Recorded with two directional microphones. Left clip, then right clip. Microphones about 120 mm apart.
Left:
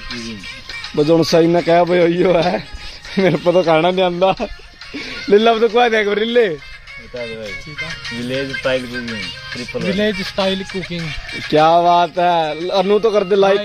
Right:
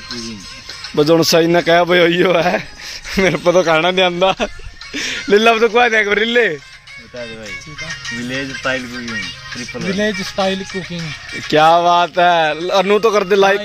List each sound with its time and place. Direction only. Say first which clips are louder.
0.9 s a man's voice: right 1 dB; centre (ahead or behind)
4.0 s a man's voice: right 1 dB; 5° right (ahead or behind)
4.9 s a man's voice: even; 5° left (ahead or behind)
7.2 s speech: left 2 dB; 35° left (ahead or behind)
11.5 s a man's voice: right 1 dB; centre (ahead or behind)